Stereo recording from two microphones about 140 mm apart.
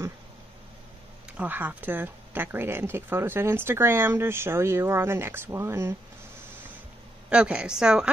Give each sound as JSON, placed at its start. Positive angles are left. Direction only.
{"t": 1.3, "sound": "speech", "side_deg": -10}
{"t": 7.2, "sound": "speech", "side_deg": -10}